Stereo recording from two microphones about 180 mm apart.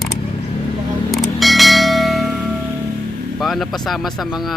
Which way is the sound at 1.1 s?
Centre (ahead or behind).